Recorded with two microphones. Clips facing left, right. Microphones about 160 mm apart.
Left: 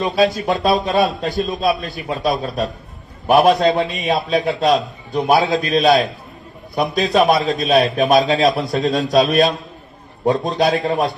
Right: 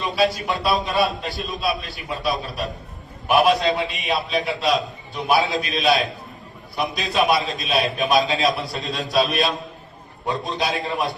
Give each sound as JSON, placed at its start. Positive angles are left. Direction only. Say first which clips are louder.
{"t": 0.4, "sound": "a man's voice", "louder": "left 5 dB", "side_deg": 45}